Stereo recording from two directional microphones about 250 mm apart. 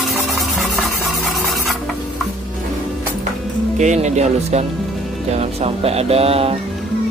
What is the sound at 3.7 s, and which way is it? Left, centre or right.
Speech, right.